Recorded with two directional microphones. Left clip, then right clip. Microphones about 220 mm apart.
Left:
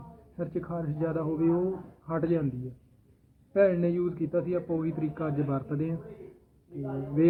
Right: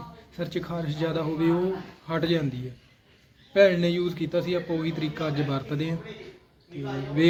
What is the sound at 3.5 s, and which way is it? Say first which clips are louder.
A man's voice: right 4 dB; 10° right (ahead or behind).